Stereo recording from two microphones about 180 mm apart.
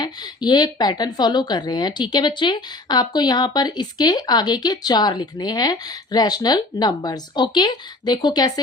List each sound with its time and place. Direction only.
0.0 s a woman's voice: 25° left (ahead or behind)